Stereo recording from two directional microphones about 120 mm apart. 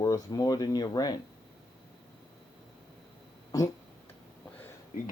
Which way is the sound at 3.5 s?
30° left (ahead or behind).